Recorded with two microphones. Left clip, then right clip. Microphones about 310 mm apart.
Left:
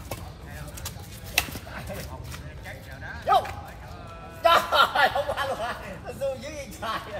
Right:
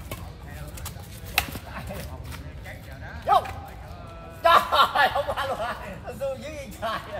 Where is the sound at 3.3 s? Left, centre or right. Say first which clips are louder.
Right 1 dB; centre.